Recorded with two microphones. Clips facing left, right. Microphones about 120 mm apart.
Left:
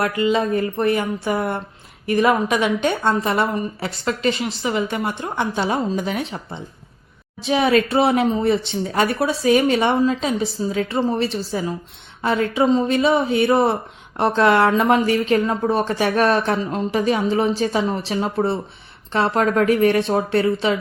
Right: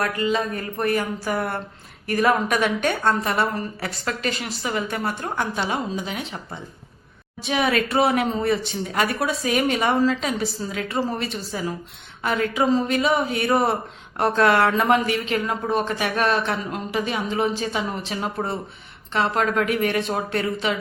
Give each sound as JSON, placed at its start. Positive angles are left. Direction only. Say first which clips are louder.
{"t": 0.0, "sound": "a woman's voice", "louder": "left 4 dB", "side_deg": 25}
{"t": 7.4, "sound": "a woman's voice", "louder": "left 5 dB", "side_deg": 30}
{"t": 15.0, "sound": "speech", "louder": "left 6 dB", "side_deg": 40}